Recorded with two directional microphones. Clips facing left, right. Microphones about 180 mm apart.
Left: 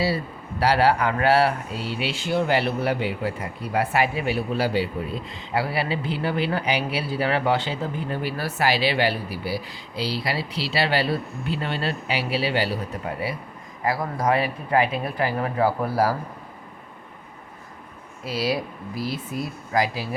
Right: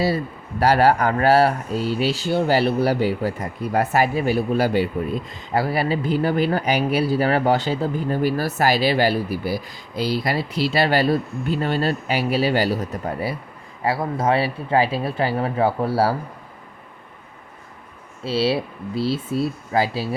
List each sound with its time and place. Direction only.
0.6 s speech: 45° right (ahead or behind)
13.8 s speech: 25° right (ahead or behind)
18.2 s speech: 30° right (ahead or behind)